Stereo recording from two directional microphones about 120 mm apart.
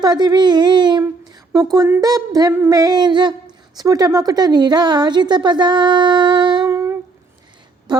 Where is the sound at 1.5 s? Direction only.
30° right (ahead or behind).